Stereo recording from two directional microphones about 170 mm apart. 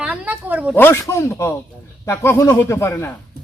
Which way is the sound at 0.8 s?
15° left (ahead or behind).